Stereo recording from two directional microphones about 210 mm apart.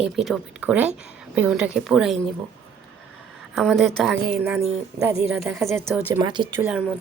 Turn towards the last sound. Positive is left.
turn(degrees=-5)  # may be behind; listen again after turning